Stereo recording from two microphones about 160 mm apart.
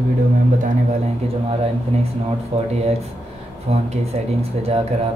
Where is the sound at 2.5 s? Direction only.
40° right (ahead or behind).